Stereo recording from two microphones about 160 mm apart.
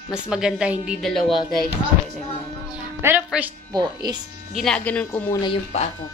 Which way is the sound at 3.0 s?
10° right (ahead or behind).